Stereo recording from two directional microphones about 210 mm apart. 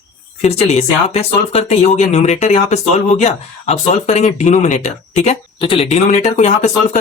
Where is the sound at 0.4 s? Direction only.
30° left (ahead or behind).